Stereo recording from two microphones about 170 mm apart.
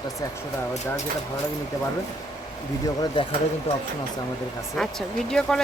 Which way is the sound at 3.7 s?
35° left (ahead or behind).